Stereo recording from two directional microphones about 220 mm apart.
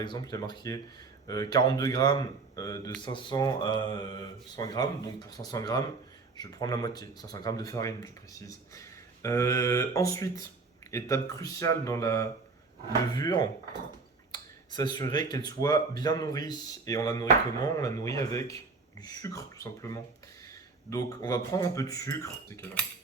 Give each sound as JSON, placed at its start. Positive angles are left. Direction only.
{"t": 0.0, "sound": "speech", "side_deg": 20}